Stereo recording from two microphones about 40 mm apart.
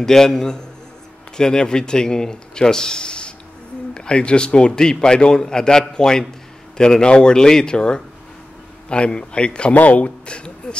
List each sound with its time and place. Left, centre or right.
0.0 s a man's voice: centre
9.8 s speech: left